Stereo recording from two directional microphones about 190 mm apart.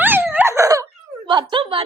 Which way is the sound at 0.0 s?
10° right (ahead or behind).